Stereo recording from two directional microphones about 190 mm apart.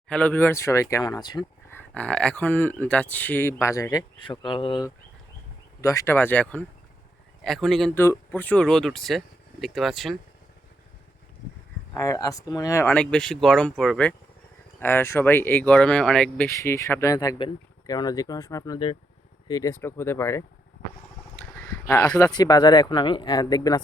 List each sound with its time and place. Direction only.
0.1 s speech: 10° left (ahead or behind)
1.8 s speech: 5° left (ahead or behind)
7.9 s speech: 15° left (ahead or behind)
11.9 s speech: 15° left (ahead or behind)
16.6 s speech: 15° left (ahead or behind)
21.3 s a sound: 5° left (ahead or behind)
22.2 s speech: 20° left (ahead or behind)